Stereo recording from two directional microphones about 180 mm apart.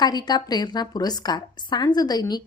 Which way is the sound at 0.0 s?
20° left (ahead or behind).